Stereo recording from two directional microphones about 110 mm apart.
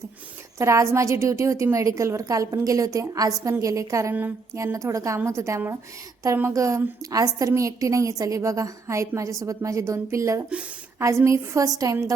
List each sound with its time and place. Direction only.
0.6 s a woman's voice: 25° right (ahead or behind)